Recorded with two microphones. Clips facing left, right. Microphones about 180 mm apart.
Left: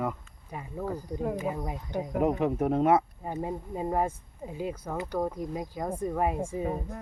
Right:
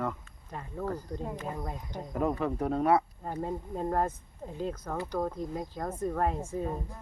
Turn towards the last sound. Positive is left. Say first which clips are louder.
# left 2 dB
turn(degrees=10)  # may be behind; listen again after turning